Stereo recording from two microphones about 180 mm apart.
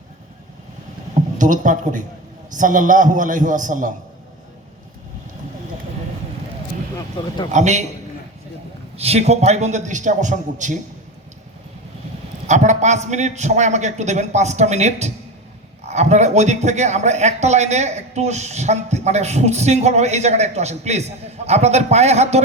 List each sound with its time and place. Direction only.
1.4 s a man's voice: 45° right (ahead or behind)
7.5 s a man's voice: 40° right (ahead or behind)
9.0 s a man's voice: 35° right (ahead or behind)
12.5 s a man's voice: 40° right (ahead or behind)